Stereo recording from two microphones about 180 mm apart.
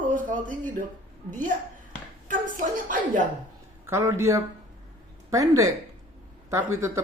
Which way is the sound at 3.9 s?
15° right (ahead or behind).